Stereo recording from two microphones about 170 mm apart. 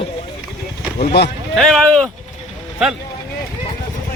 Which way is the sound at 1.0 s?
75° left (ahead or behind).